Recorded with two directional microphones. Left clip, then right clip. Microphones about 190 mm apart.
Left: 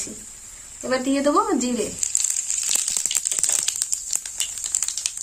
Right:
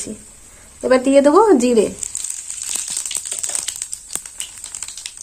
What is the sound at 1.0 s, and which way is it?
Speech, 60° right (ahead or behind).